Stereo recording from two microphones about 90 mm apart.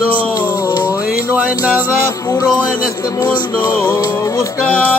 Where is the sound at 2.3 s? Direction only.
45° left (ahead or behind).